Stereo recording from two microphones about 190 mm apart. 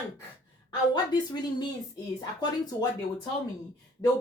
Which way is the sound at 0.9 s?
20° left (ahead or behind).